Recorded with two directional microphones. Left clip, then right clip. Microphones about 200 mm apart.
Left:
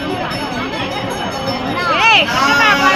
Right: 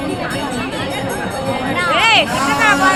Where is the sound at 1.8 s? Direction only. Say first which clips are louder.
Left 2 dB; 20° left (ahead or behind).